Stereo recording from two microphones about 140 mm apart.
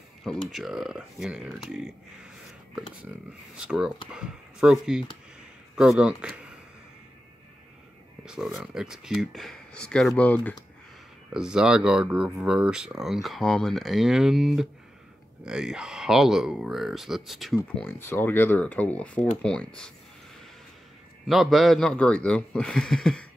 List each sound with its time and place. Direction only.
0.5 s speech: centre (ahead or behind)
8.3 s speech: centre (ahead or behind)
11.3 s speech: 5° right (ahead or behind)
17.8 s speech: 15° left (ahead or behind)
21.3 s speech: centre (ahead or behind)